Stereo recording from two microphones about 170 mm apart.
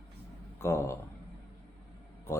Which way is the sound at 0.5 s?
15° left (ahead or behind).